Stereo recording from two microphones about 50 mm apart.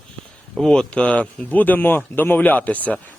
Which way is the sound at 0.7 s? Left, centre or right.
Centre.